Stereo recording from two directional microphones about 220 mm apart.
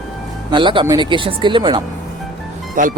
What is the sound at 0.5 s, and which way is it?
Speech, 20° right (ahead or behind).